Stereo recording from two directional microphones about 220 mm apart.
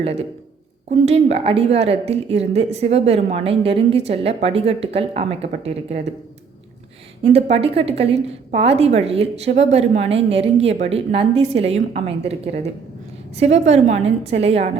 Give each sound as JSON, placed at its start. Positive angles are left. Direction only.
{"t": 0.0, "sound": "a woman's voice", "side_deg": -25}
{"t": 7.2, "sound": "a woman's voice", "side_deg": -25}